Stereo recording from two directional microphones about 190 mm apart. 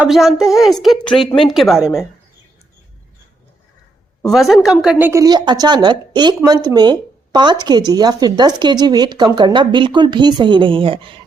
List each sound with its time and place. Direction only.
0.0 s a woman's voice: centre (ahead or behind)
4.3 s speech: centre (ahead or behind); by 11.1 s 25° right (ahead or behind)